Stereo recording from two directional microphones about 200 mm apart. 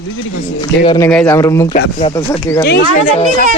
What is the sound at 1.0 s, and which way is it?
Speech, 10° left (ahead or behind).